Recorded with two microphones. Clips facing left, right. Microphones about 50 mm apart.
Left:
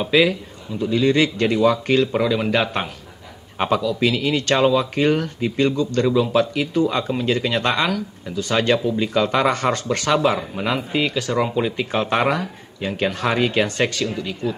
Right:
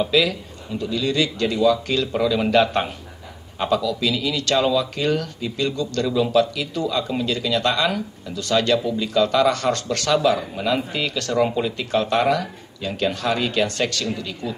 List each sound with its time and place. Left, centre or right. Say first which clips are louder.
0.0 s speech: left 2 dB; left
2.5 s a man's voice: right 3 dB; centre
3.5 s speech: left 1 dB; left